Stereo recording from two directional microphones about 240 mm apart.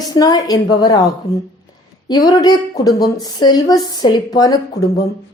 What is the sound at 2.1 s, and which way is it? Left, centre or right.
A woman's voice, centre.